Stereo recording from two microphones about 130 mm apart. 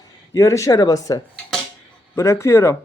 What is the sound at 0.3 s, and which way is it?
Speech, 25° left (ahead or behind).